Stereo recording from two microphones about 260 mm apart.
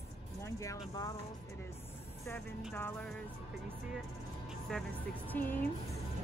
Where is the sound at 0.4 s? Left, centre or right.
Centre.